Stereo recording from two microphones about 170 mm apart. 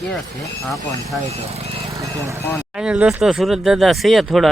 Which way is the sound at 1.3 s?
35° right (ahead or behind).